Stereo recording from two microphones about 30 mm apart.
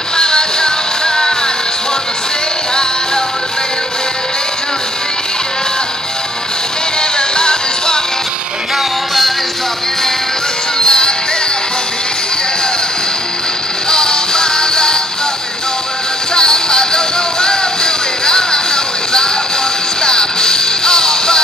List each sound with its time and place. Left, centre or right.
0.2 s music: left
7.0 s music: left
10.8 s music: left
13.8 s music: left
16.3 s music: left
20.0 s music: left